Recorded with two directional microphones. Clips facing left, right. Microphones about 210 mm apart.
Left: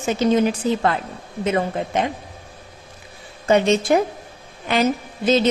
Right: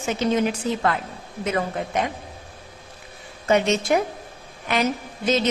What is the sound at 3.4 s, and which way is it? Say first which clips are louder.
Speech: left 3 dB; 30° left (ahead or behind).